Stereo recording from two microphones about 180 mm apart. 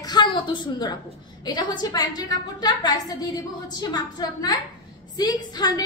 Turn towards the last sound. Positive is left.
turn(degrees=20)  # may be behind; listen again after turning